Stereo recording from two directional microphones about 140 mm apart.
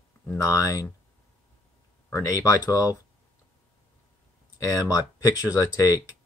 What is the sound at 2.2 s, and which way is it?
Speech, 25° left (ahead or behind).